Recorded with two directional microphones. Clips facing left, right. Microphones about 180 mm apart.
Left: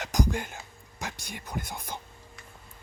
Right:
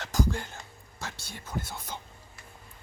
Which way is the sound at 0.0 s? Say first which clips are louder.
Left 1 dB; 15° left (ahead or behind).